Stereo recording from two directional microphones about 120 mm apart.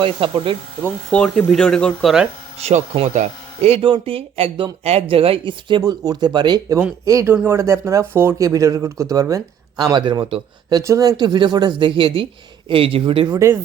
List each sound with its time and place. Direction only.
0.0 s speech: 45° right (ahead or behind)
1.1 s speech: 10° left (ahead or behind)
2.6 s speech: 60° right (ahead or behind); by 3.8 s 75° right (ahead or behind)
3.8 s speech: 45° right (ahead or behind)
7.0 s speech: 25° right (ahead or behind); by 10.4 s 45° right (ahead or behind)
10.7 s speech: 30° right (ahead or behind)